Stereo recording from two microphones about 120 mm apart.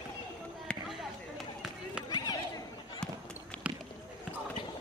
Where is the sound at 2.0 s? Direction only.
35° left (ahead or behind).